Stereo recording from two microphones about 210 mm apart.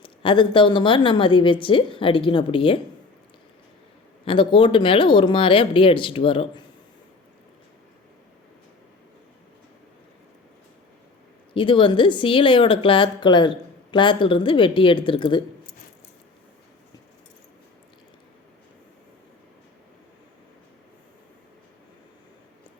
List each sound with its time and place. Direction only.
0.0 s speech: 25° left (ahead or behind)
4.3 s speech: 25° left (ahead or behind)
11.5 s speech: 25° left (ahead or behind)